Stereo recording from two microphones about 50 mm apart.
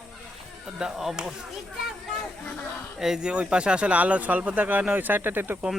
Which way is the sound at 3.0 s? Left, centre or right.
Centre.